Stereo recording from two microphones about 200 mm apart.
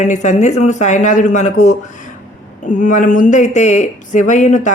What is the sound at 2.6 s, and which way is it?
Speech, 40° left (ahead or behind).